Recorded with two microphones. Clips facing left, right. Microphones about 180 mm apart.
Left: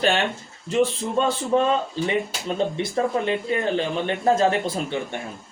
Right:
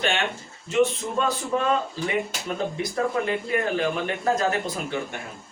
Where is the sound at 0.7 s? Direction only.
30° left (ahead or behind).